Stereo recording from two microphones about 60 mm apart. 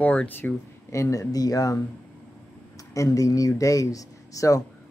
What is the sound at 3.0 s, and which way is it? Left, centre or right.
Speech, left.